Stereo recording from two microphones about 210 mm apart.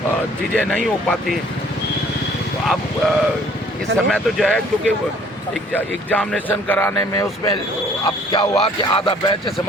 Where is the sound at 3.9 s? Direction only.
5° left (ahead or behind).